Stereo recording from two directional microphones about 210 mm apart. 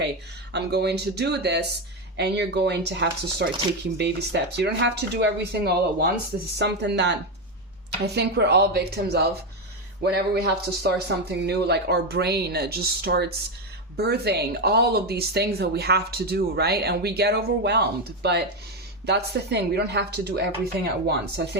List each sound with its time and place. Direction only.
0.5 s speech: 50° right (ahead or behind)